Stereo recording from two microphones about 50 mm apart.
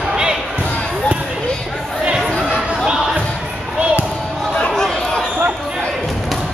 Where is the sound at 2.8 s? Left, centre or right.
Centre.